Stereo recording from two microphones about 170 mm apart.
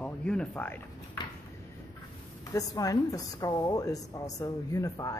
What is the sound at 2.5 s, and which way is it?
A woman's voice, 20° left (ahead or behind).